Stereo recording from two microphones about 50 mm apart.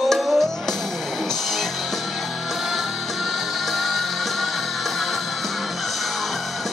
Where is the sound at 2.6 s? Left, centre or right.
Centre.